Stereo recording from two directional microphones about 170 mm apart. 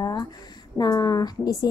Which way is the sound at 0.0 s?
25° left (ahead or behind).